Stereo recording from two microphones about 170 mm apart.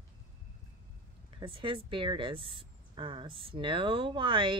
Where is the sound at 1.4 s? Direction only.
30° right (ahead or behind).